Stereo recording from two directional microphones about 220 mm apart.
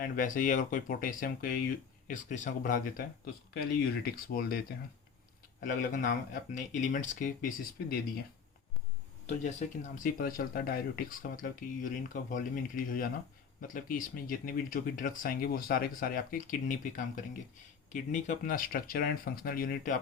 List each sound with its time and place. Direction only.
0.0 s speech: 40° left (ahead or behind)
9.2 s speech: 30° left (ahead or behind)